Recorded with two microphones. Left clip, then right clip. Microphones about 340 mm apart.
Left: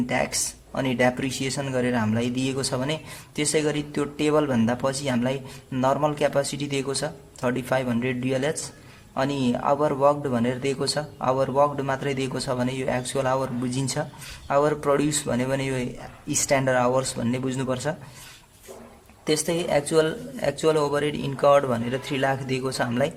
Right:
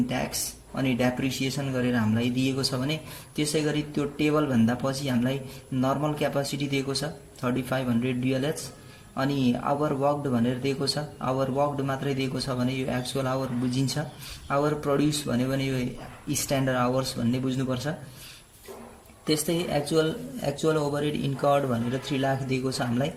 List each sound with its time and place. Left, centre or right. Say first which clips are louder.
0.1 s speech: left 5 dB; centre
19.2 s speech: left 3 dB; centre